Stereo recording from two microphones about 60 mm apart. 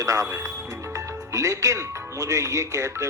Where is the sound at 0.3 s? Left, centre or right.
Right.